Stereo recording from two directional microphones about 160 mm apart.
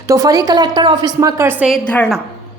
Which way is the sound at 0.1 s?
20° right (ahead or behind).